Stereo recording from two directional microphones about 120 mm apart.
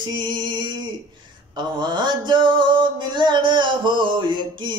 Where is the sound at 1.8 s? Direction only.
40° right (ahead or behind).